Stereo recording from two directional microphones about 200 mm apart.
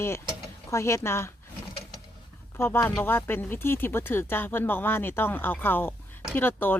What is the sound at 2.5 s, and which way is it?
Speech, 10° left (ahead or behind).